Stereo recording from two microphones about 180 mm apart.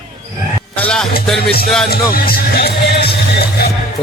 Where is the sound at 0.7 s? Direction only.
5° left (ahead or behind).